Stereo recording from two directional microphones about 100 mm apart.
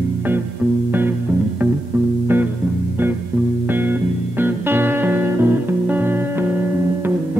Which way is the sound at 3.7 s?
20° right (ahead or behind).